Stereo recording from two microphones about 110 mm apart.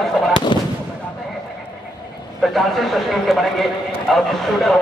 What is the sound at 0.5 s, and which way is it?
Fireworks, 45° left (ahead or behind).